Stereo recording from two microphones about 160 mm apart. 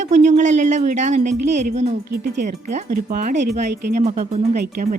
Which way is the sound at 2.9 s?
60° right (ahead or behind).